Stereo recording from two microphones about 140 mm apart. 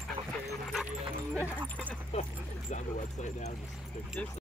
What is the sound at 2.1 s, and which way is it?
Speech, 45° left (ahead or behind).